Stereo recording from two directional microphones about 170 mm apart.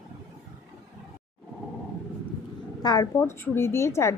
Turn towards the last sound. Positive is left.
turn(degrees=15)  # may be behind; listen again after turning